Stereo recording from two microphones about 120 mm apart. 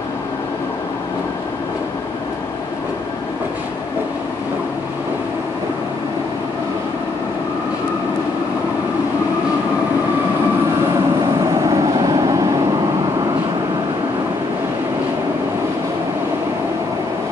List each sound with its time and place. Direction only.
11.7 s vehicle: 30° right (ahead or behind)